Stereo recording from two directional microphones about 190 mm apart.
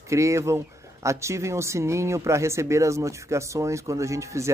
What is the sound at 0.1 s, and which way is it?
Speech, 15° right (ahead or behind).